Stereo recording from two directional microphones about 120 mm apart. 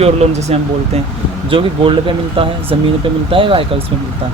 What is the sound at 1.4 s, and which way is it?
Speech, 50° right (ahead or behind).